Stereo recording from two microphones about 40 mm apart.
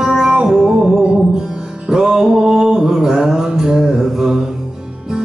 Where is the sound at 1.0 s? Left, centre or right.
Right.